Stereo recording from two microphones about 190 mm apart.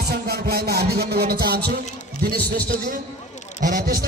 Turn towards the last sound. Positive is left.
turn(degrees=-45)  # may be behind; listen again after turning